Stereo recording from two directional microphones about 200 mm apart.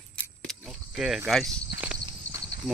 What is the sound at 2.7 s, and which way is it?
Speech, 5° right (ahead or behind).